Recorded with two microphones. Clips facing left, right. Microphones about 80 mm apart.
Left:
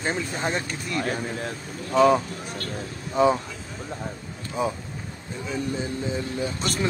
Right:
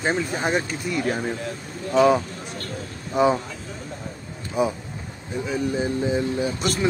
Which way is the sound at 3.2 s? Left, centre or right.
Centre.